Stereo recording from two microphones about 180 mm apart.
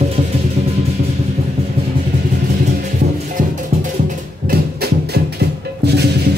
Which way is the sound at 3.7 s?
40° right (ahead or behind).